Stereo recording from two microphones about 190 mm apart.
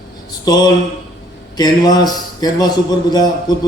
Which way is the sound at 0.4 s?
20° left (ahead or behind).